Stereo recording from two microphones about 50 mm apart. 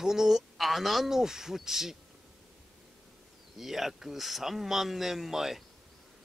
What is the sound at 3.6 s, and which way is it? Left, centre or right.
Speech, centre.